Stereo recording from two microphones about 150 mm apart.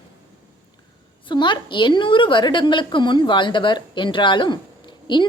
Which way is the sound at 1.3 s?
30° left (ahead or behind).